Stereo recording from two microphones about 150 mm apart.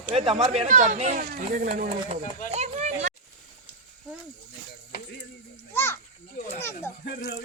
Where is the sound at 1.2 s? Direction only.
70° right (ahead or behind).